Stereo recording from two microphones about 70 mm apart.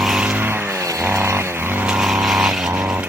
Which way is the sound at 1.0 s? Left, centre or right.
Right.